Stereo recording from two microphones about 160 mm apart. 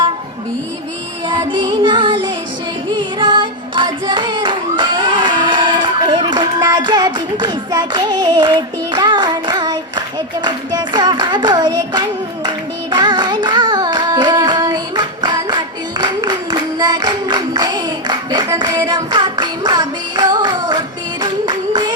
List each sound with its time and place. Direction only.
1.3 s music: 30° right (ahead or behind)
6.3 s child singing: 25° right (ahead or behind)
10.4 s clapping: 25° right (ahead or behind)
12.9 s child singing: 30° right (ahead or behind)
21.2 s singing: 30° right (ahead or behind)